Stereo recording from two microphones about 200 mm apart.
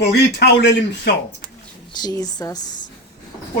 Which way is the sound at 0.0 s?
55° left (ahead or behind).